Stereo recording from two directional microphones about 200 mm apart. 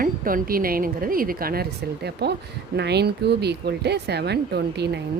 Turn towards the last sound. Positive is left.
turn(degrees=-55)  # may be behind; listen again after turning